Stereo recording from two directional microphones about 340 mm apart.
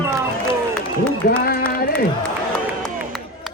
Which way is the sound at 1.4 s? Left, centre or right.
Left.